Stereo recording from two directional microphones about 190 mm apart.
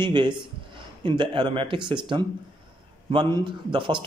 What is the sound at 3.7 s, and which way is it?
Speech, 25° right (ahead or behind).